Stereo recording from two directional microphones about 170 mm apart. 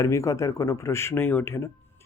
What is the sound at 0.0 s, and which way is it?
Speech, 20° left (ahead or behind).